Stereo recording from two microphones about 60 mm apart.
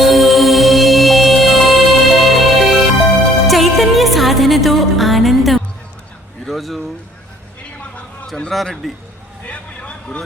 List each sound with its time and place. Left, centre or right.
0.0 s music: centre
6.4 s a sound: centre
8.4 s a man's voice: centre
9.5 s vehicle: centre